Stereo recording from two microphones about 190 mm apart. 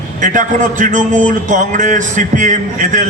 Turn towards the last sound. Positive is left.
turn(degrees=-40)  # may be behind; listen again after turning